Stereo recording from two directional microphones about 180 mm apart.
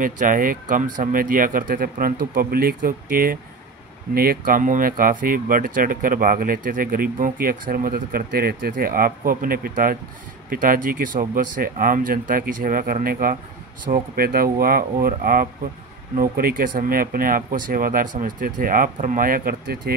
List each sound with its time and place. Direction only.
0.0 s speech: 50° right (ahead or behind)